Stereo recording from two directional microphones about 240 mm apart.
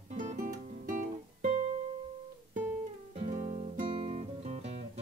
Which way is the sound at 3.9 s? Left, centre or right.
Right.